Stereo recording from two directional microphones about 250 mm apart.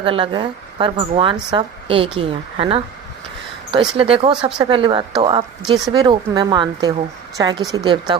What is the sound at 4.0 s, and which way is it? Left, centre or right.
A woman's voice, right.